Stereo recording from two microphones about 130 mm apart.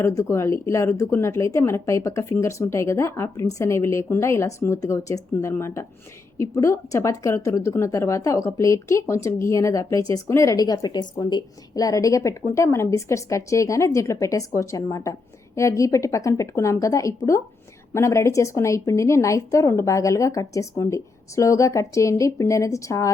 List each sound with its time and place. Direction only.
0.0 s a woman's voice: 25° left (ahead or behind)